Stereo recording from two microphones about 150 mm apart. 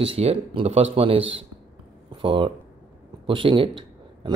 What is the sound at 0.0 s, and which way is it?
Speech, 40° right (ahead or behind).